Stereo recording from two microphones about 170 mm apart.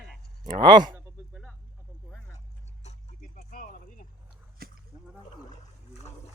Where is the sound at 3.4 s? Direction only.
55° left (ahead or behind).